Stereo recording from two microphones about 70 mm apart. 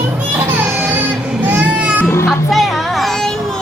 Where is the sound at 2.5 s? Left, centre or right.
Centre.